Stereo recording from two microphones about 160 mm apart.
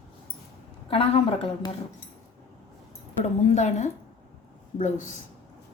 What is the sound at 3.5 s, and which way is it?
A woman's voice, 45° left (ahead or behind).